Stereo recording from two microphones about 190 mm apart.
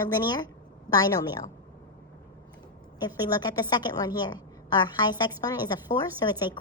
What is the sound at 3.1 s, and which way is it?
A woman's voice, 20° left (ahead or behind).